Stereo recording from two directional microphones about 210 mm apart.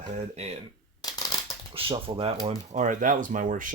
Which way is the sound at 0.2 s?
30° right (ahead or behind).